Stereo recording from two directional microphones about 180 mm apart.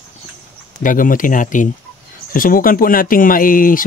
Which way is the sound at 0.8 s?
50° left (ahead or behind).